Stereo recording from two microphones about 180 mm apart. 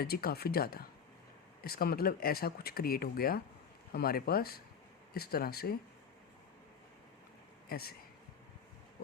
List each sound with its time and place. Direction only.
0.0 s speech: 60° left (ahead or behind)
7.7 s speech: 60° left (ahead or behind)